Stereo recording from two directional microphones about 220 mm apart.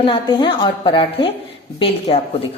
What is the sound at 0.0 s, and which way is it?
A woman's voice, 25° left (ahead or behind).